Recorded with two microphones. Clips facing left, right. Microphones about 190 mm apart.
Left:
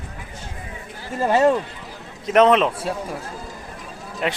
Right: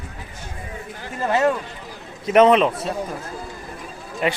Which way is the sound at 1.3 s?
35° left (ahead or behind).